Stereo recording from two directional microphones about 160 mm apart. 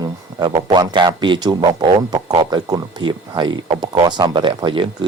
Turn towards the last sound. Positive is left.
turn(degrees=-30)  # may be behind; listen again after turning